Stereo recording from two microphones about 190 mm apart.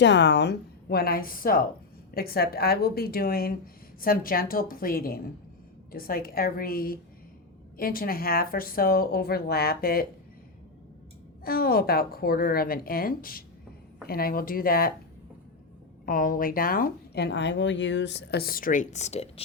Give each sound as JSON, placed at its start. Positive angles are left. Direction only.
{"t": 0.0, "sound": "a woman's voice", "side_deg": 65}
{"t": 11.4, "sound": "speech", "side_deg": 50}
{"t": 16.0, "sound": "speech", "side_deg": 45}